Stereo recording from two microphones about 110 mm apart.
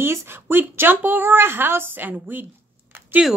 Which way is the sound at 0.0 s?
20° right (ahead or behind).